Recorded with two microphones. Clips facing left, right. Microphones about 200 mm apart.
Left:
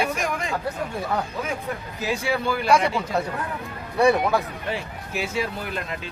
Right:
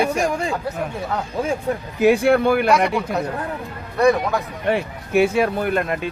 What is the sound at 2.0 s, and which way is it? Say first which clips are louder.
Speech: right 11 dB; 55° right (ahead or behind).